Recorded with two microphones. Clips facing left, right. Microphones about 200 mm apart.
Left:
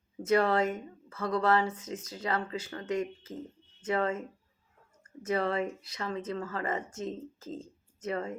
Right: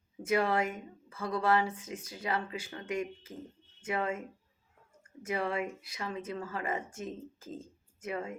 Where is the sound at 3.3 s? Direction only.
25° left (ahead or behind).